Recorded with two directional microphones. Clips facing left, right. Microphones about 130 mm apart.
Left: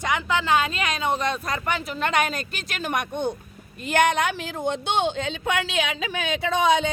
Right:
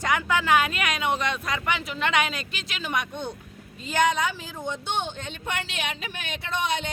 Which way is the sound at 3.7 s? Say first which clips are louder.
Left 3 dB; 65° left (ahead or behind).